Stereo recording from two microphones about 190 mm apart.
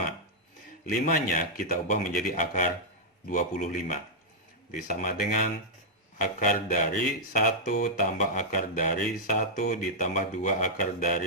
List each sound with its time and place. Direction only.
0.9 s speech: 45° left (ahead or behind)